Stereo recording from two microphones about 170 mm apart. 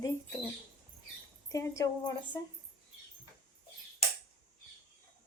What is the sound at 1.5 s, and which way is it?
Speech, 20° left (ahead or behind).